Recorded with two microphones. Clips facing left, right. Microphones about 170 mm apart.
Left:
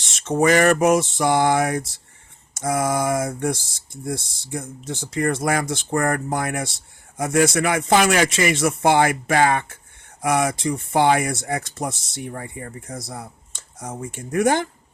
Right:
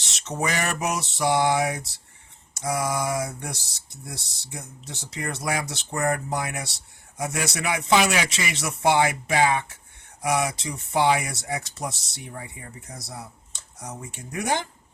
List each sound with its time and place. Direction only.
0.0 s speech: 50° left (ahead or behind)